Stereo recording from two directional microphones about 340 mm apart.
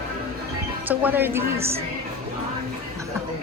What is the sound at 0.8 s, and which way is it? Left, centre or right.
Speech, centre.